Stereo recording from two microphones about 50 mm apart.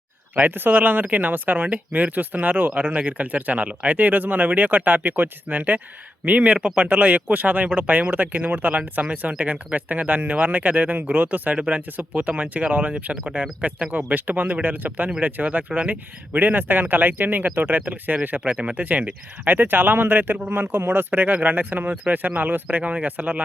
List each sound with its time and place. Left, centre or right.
0.3 s speech: right
11.5 s speech: right
11.9 s speech: right
13.2 s speech: centre
13.6 s speech: right
18.4 s speech: centre
18.7 s speech: right
19.5 s speech: right
21.2 s speech: right